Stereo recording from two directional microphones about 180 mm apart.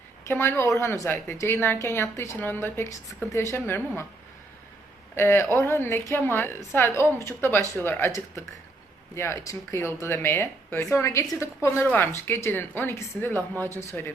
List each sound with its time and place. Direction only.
0.3 s a woman's voice: 15° left (ahead or behind)
5.1 s a woman's voice: 15° left (ahead or behind)
7.6 s speech: 15° right (ahead or behind)
7.9 s a woman's voice: 10° left (ahead or behind)